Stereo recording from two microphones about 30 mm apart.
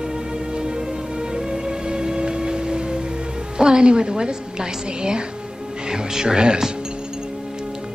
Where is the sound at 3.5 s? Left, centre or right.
Right.